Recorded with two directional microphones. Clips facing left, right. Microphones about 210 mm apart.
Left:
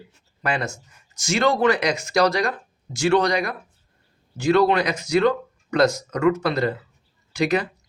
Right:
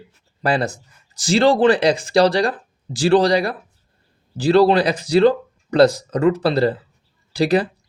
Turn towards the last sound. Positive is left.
turn(degrees=-35)  # may be behind; listen again after turning